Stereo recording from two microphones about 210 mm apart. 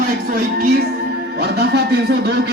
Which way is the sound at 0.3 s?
45° right (ahead or behind).